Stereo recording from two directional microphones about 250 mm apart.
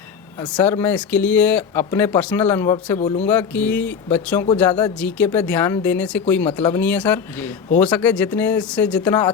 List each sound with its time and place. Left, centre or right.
0.5 s speech: centre
3.0 s speech: left
3.2 s speech: centre